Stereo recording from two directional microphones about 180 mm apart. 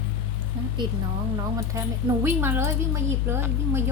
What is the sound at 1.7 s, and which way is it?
A woman's voice, 15° right (ahead or behind).